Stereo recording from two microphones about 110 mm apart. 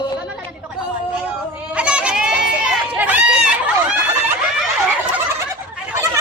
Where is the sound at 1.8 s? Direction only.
10° right (ahead or behind).